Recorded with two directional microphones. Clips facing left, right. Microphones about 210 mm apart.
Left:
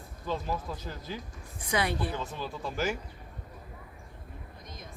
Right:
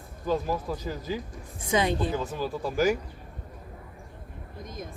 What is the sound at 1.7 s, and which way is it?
Speech, 20° right (ahead or behind).